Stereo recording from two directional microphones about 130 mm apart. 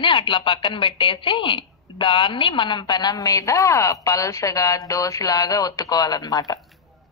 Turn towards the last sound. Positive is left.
turn(degrees=30)  # may be behind; listen again after turning